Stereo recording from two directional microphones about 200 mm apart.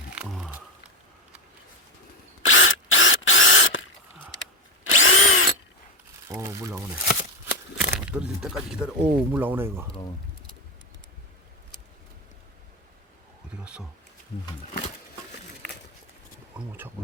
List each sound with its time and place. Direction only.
0.2 s a sound: centre (ahead or behind)
2.5 s a sound: 75° left (ahead or behind)
4.8 s drill: 80° left
6.2 s speech: 15° right (ahead or behind)
7.1 s shuffling cards: 45° left (ahead or behind)
7.9 s speech: 5° right (ahead or behind)
16.6 s speech: 10° right (ahead or behind)